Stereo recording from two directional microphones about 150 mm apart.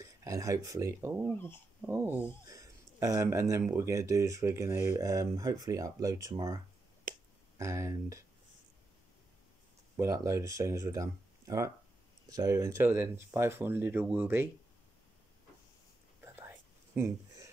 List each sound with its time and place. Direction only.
0.0 s speech: 20° right (ahead or behind)
1.2 s speech: 15° left (ahead or behind)
1.8 s speech: 10° right (ahead or behind)
7.1 s finger snapping: 65° right (ahead or behind)
7.5 s speech: 20° right (ahead or behind)
9.9 s speech: 20° right (ahead or behind)
16.2 s whispering: 15° right (ahead or behind)